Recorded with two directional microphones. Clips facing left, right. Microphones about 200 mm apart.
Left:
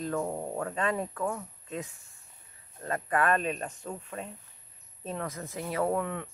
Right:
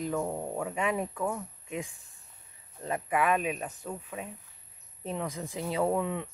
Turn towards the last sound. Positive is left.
turn(degrees=-15)  # may be behind; listen again after turning